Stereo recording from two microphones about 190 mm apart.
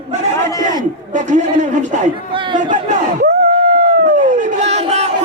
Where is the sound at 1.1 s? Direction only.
40° right (ahead or behind).